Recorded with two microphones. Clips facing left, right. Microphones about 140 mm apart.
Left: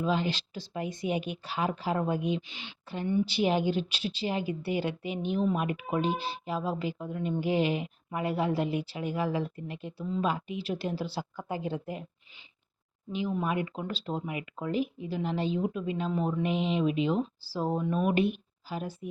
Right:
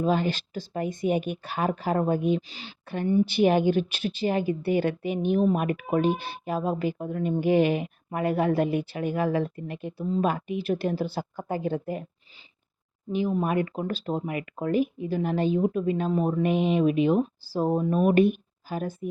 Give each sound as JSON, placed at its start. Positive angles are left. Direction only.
{"t": 0.0, "sound": "speech", "side_deg": -50}
{"t": 2.8, "sound": "a woman's voice", "side_deg": -55}
{"t": 13.1, "sound": "speech", "side_deg": -50}